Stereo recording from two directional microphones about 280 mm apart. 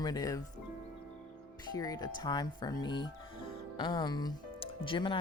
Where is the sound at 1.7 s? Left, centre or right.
Centre.